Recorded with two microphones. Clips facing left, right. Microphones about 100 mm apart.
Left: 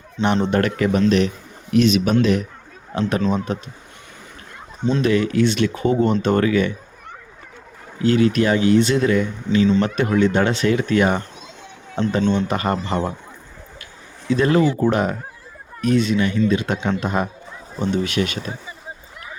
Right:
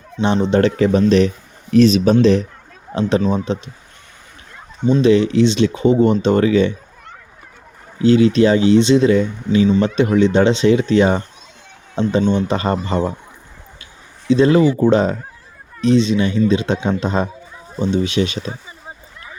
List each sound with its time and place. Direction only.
0.2 s speech: 20° right (ahead or behind)
3.1 s speech: 20° right (ahead or behind)
4.9 s speech: 20° right (ahead or behind)
8.0 s speech: 20° right (ahead or behind)
12.2 s speech: 20° right (ahead or behind)
14.3 s speech: 25° right (ahead or behind)